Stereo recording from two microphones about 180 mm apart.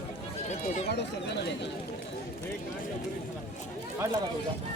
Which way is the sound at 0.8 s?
70° left (ahead or behind).